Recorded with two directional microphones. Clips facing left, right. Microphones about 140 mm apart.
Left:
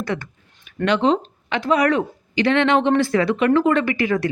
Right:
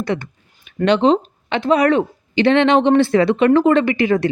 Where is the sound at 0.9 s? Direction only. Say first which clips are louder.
Right 4 dB; 25° right (ahead or behind).